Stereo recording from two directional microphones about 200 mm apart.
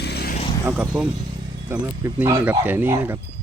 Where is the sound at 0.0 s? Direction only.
55° left (ahead or behind).